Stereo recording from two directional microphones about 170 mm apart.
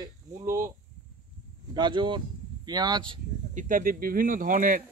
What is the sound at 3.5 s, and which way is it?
Speech, 55° right (ahead or behind).